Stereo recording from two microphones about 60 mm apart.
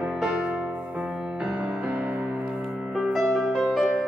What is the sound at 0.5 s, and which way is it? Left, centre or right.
Music, centre.